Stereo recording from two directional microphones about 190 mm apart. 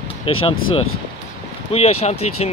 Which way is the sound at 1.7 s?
35° left (ahead or behind).